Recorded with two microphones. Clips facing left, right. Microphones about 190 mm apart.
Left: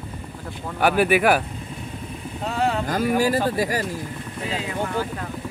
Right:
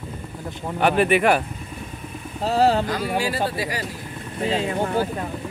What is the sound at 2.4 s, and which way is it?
Speech, 35° right (ahead or behind).